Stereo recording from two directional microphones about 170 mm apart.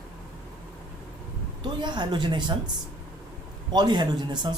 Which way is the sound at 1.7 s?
25° right (ahead or behind).